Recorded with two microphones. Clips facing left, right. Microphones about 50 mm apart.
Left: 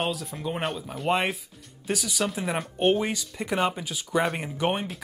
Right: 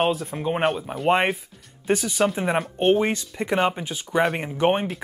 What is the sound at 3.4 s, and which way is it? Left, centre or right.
Speech, centre.